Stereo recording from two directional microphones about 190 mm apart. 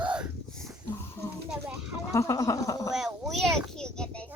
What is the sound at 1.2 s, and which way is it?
Music, 10° left (ahead or behind).